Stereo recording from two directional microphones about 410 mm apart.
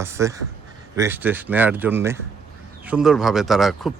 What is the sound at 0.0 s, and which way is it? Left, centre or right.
Speech, centre.